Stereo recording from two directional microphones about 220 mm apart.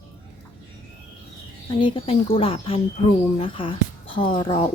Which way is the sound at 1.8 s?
25° left (ahead or behind).